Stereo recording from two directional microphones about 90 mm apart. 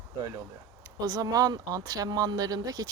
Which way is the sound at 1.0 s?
45° right (ahead or behind).